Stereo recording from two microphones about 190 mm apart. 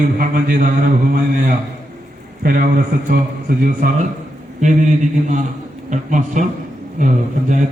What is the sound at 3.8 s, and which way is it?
A man's voice, 50° right (ahead or behind).